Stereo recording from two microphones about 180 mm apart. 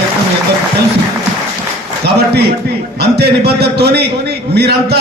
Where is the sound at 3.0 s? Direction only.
65° right (ahead or behind).